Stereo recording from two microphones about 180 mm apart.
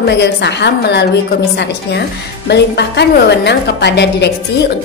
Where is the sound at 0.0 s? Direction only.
65° left (ahead or behind).